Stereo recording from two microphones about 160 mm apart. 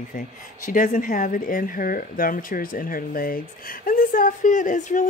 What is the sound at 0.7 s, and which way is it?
Speech, 55° left (ahead or behind).